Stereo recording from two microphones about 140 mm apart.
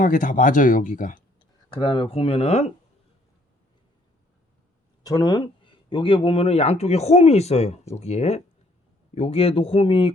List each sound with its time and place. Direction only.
0.0 s speech: 70° left (ahead or behind)
1.4 s speech: 35° left (ahead or behind)
5.0 s speech: 30° left (ahead or behind)